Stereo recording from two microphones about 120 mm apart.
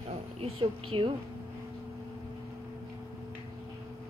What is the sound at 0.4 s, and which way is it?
Speech, 45° right (ahead or behind).